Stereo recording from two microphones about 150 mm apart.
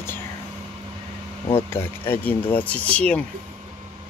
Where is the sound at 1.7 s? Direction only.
15° left (ahead or behind).